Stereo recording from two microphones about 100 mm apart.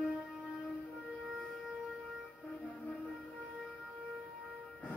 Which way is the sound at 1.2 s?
Centre (ahead or behind).